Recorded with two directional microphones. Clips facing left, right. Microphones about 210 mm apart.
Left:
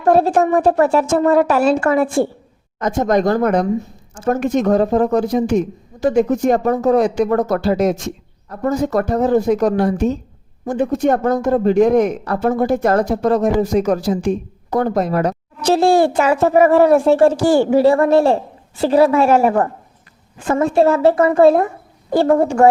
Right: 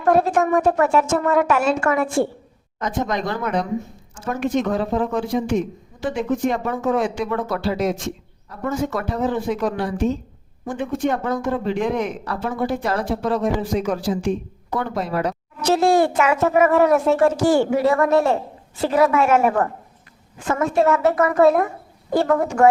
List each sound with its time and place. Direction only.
0.0 s a child's voice: 30° left (ahead or behind)
2.7 s a woman's voice: 45° left (ahead or behind)
15.6 s a child's voice: 30° left (ahead or behind)